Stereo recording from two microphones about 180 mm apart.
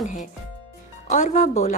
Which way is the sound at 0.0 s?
45° left (ahead or behind).